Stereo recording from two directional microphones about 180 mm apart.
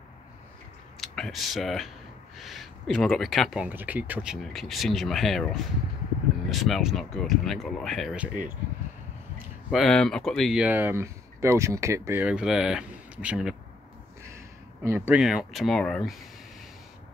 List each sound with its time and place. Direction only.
1.0 s speech: centre (ahead or behind)